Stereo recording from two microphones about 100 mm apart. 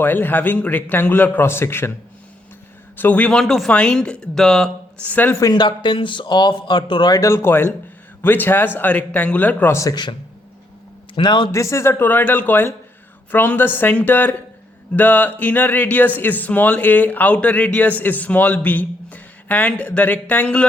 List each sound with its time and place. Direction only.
0.0 s a man's voice: 20° left (ahead or behind)
3.0 s speech: 15° left (ahead or behind)
3.4 s speech: 5° left (ahead or behind)
5.0 s speech: 15° left (ahead or behind)
5.4 s speech: 45° left (ahead or behind); by 9.7 s 15° left (ahead or behind)
9.9 s speech: 50° left (ahead or behind)
11.2 s speech: 50° left (ahead or behind)
11.5 s a man's voice: 30° left (ahead or behind); by 20.7 s 15° left (ahead or behind)